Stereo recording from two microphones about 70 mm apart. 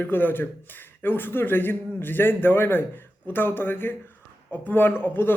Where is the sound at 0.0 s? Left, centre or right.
Left.